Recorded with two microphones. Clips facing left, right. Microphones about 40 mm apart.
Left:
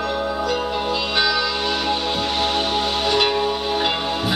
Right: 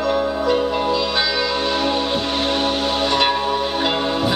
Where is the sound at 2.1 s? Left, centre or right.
Centre.